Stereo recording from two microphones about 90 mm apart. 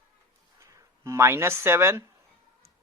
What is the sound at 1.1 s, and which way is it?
Speech, 30° right (ahead or behind).